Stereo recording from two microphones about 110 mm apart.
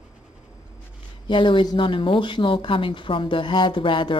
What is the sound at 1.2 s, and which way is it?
Speech, 45° left (ahead or behind).